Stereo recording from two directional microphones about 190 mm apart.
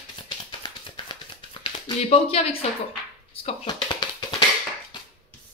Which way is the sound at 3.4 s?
25° left (ahead or behind).